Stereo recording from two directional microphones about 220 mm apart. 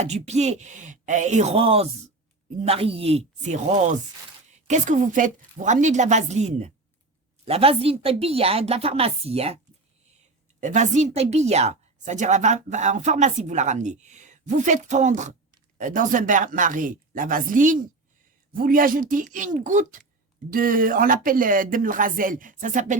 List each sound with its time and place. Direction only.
0.0 s a woman's voice: 30° right (ahead or behind)
10.6 s a woman's voice: 35° right (ahead or behind)